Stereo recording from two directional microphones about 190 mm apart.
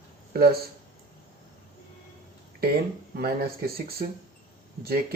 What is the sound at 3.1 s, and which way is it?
Speech, 55° right (ahead or behind).